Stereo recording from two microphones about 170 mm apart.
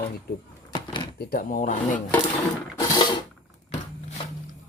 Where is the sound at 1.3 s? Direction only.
50° left (ahead or behind).